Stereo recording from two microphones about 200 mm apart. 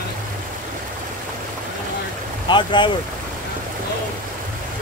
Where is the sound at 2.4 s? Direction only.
25° left (ahead or behind).